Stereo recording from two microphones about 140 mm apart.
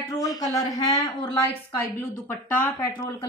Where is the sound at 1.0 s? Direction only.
40° left (ahead or behind).